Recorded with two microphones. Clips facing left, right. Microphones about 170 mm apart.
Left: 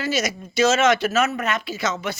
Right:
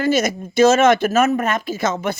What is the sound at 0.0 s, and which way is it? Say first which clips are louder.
Speech: right 7 dB; 50° right (ahead or behind).